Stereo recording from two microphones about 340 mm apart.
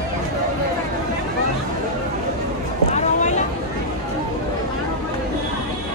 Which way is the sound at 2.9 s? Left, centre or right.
Left.